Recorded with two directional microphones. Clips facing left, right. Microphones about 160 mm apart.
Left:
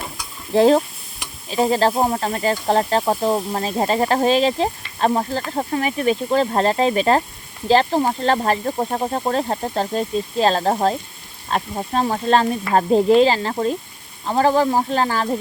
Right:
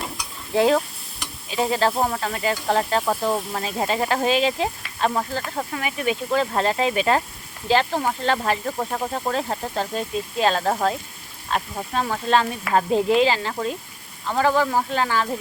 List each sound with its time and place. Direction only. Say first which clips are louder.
0.5 s speech: left 5 dB; 35° left (ahead or behind)